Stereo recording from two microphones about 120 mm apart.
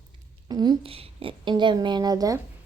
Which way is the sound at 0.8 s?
50° right (ahead or behind).